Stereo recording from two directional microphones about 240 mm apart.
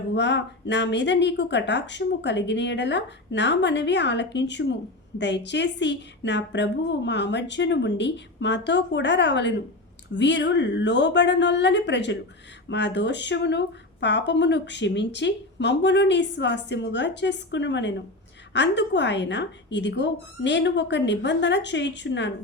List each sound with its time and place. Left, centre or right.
0.1 s speech: left